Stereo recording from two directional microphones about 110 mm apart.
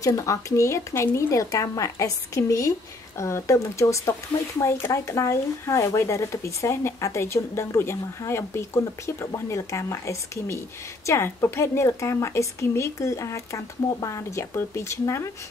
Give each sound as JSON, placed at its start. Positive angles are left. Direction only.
{"t": 0.0, "sound": "speech", "side_deg": 30}